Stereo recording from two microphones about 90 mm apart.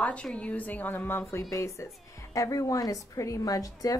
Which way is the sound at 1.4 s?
40° left (ahead or behind).